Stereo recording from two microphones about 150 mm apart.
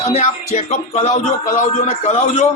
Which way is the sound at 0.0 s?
50° left (ahead or behind).